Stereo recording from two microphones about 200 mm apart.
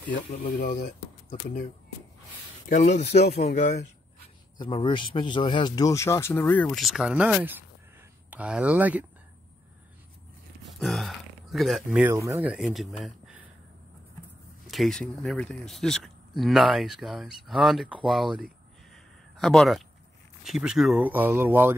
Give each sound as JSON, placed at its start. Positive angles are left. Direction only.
{"t": 0.4, "sound": "speech", "side_deg": 40}
{"t": 2.7, "sound": "speech", "side_deg": 40}
{"t": 3.2, "sound": "speech", "side_deg": 55}
{"t": 3.5, "sound": "speech", "side_deg": 35}
{"t": 4.6, "sound": "speech", "side_deg": 20}
{"t": 10.6, "sound": "speech", "side_deg": 0}
{"t": 14.7, "sound": "speech", "side_deg": 0}